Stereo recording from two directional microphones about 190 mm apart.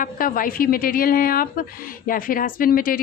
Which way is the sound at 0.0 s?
45° left (ahead or behind).